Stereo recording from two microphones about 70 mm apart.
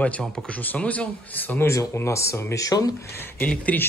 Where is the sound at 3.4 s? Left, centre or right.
Left.